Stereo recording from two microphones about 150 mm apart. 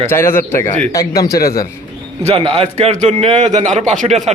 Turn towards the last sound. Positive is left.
turn(degrees=-50)  # may be behind; listen again after turning